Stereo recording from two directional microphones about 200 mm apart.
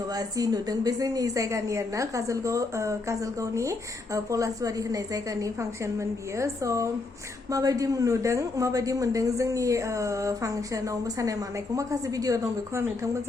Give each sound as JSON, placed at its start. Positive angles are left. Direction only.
{"t": 0.1, "sound": "a woman's voice", "side_deg": -20}